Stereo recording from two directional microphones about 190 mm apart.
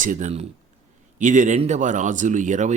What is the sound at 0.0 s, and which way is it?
A man's voice, 40° right (ahead or behind).